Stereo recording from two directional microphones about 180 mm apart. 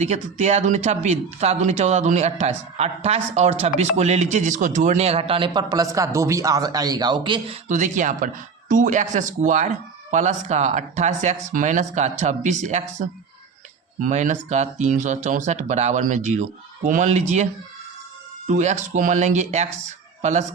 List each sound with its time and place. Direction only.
0.0 s speech: 40° right (ahead or behind)